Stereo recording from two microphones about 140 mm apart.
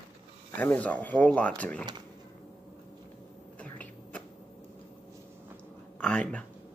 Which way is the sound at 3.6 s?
10° left (ahead or behind).